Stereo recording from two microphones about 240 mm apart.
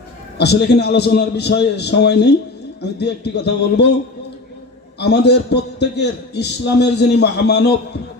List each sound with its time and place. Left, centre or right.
0.3 s a man's voice: left
4.9 s a man's voice: left